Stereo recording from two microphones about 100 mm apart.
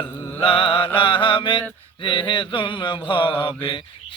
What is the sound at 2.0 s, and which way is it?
Mantra, 55° left (ahead or behind).